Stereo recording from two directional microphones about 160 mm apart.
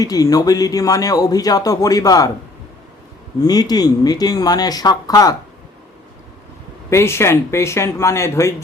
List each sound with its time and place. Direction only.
0.0 s speech: 25° left (ahead or behind)
3.4 s speech: 25° left (ahead or behind)
6.9 s speech: 15° left (ahead or behind)